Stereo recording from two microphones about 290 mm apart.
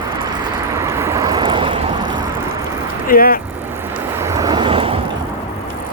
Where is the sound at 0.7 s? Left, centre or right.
Centre.